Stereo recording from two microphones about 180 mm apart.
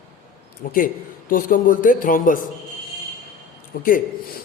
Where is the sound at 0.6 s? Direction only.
50° left (ahead or behind).